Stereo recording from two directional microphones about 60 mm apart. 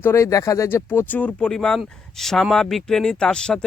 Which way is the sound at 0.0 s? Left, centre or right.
Left.